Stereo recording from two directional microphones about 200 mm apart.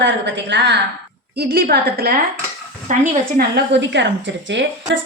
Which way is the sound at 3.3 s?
55° right (ahead or behind).